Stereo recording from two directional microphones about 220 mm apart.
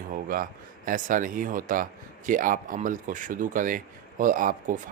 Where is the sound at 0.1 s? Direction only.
40° right (ahead or behind).